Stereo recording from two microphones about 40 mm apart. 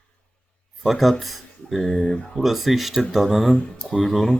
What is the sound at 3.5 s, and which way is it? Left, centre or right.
Speech, left.